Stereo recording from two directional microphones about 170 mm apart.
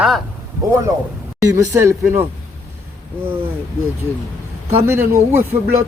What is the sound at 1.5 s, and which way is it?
Speech, 20° right (ahead or behind).